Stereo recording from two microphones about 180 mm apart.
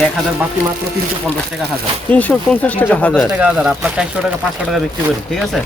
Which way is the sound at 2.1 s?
10° left (ahead or behind).